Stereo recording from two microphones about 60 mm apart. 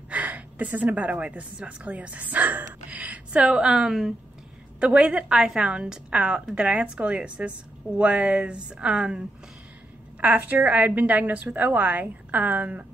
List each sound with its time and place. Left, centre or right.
0.1 s a woman's voice: right
10.2 s a woman's voice: right